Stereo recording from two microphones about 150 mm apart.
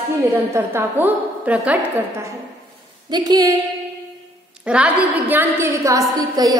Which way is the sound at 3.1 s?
25° right (ahead or behind).